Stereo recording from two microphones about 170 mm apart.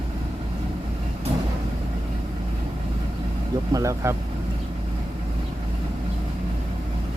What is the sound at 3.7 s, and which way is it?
Speech, 15° right (ahead or behind).